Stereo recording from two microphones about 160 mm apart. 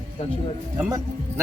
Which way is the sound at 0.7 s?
15° right (ahead or behind).